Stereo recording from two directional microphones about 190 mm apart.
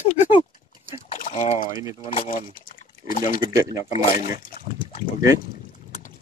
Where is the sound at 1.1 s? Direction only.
40° left (ahead or behind).